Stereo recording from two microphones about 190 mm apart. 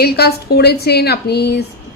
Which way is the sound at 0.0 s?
55° left (ahead or behind).